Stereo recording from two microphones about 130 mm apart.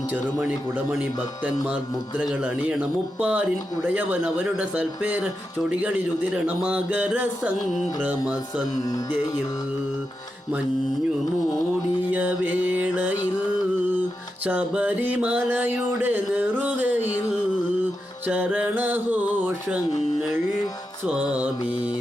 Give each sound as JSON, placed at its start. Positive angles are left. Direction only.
{"t": 0.1, "sound": "music", "side_deg": -15}
{"t": 8.8, "sound": "music", "side_deg": 30}
{"t": 12.1, "sound": "music", "side_deg": -10}
{"t": 14.4, "sound": "music", "side_deg": -10}
{"t": 18.3, "sound": "music", "side_deg": -15}
{"t": 21.2, "sound": "music", "side_deg": -10}